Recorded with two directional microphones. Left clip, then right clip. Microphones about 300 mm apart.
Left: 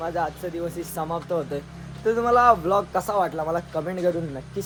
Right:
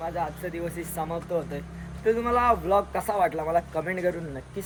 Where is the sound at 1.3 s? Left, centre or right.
Centre.